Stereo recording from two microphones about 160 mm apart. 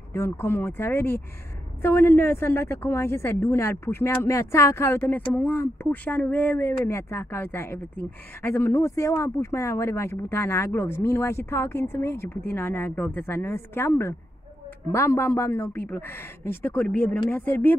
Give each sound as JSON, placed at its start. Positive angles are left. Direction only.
{"t": 0.1, "sound": "a woman's voice", "side_deg": 15}